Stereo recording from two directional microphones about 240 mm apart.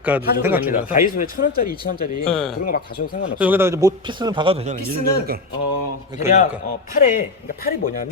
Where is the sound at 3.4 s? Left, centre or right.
Centre; by 4.8 s right.